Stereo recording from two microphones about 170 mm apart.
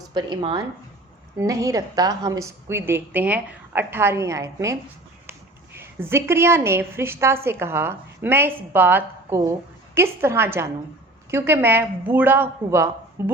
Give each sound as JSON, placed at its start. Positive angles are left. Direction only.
{"t": 0.1, "sound": "a woman's voice", "side_deg": -25}